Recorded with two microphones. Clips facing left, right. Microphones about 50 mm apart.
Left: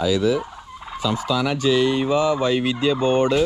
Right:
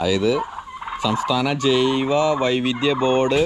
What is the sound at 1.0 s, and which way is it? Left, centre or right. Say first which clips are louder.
Fowl: right 1 dB; right.